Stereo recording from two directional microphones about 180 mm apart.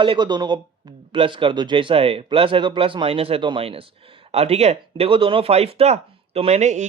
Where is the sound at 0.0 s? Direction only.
25° right (ahead or behind).